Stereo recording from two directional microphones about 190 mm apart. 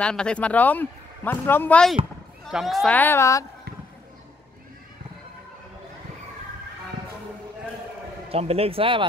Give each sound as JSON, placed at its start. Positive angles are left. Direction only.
{"t": 0.0, "sound": "a man's voice", "side_deg": 5}
{"t": 8.3, "sound": "a man's voice", "side_deg": -30}